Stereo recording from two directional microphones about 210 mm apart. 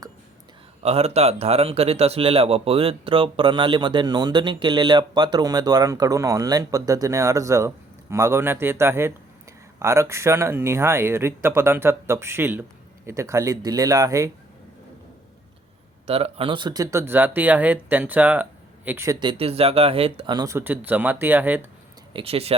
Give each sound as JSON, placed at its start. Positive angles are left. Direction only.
{"t": 0.8, "sound": "speech", "side_deg": -30}
{"t": 16.0, "sound": "speech", "side_deg": -30}
{"t": 19.2, "sound": "speech", "side_deg": -25}
{"t": 22.1, "sound": "speech", "side_deg": -30}